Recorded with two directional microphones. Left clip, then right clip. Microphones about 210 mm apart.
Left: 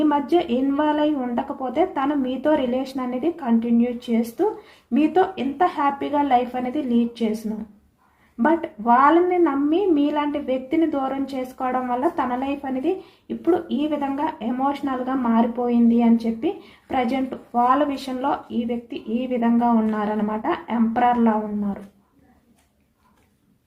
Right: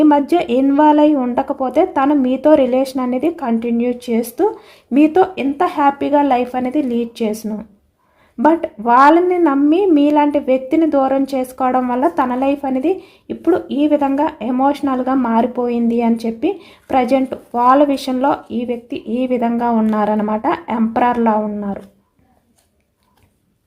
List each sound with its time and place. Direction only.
0.0 s a woman's voice: 50° right (ahead or behind)
8.4 s a woman's voice: 50° right (ahead or behind)